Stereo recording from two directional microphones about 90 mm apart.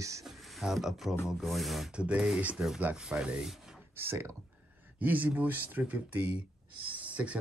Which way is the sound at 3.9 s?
25° right (ahead or behind).